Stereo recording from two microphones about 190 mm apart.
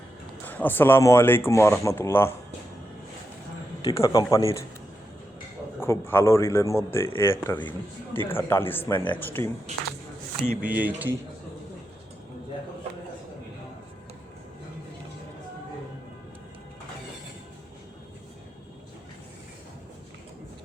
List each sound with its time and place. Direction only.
0.4 s a man's voice: 10° left (ahead or behind)
3.9 s a man's voice: 20° left (ahead or behind)
5.8 s a man's voice: 10° left (ahead or behind)
9.7 s speech: 35° right (ahead or behind)
10.6 s speech: 10° right (ahead or behind)